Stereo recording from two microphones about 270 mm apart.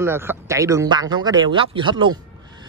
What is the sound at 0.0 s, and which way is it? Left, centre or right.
A man's voice, centre.